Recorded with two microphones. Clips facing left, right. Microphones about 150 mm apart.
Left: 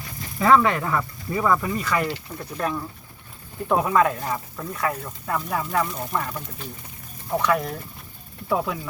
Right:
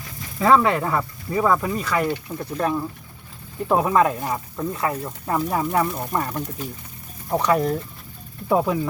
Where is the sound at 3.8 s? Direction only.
25° right (ahead or behind).